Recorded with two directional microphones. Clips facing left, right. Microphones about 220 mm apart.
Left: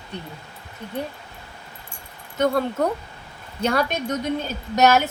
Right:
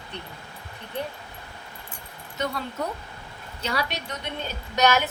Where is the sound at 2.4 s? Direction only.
50° left (ahead or behind).